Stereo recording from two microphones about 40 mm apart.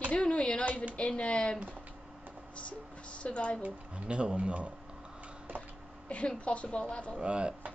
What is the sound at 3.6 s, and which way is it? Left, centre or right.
Speech, right.